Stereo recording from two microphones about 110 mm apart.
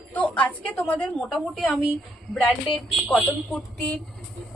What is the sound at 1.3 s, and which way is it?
Speech, centre (ahead or behind).